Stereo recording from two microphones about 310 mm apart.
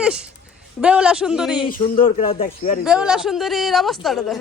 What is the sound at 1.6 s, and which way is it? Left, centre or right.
Speech, left.